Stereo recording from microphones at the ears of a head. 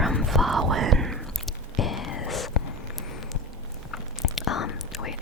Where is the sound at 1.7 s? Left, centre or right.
Left.